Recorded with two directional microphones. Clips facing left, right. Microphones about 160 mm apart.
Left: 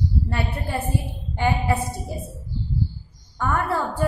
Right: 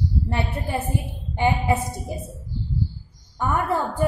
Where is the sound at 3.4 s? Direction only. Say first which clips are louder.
Right 1 dB; 15° right (ahead or behind).